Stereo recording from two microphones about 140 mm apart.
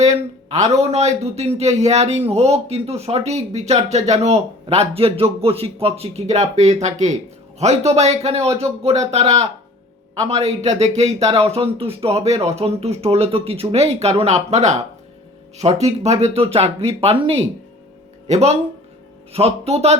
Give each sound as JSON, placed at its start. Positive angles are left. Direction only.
{"t": 0.0, "sound": "speech", "side_deg": -55}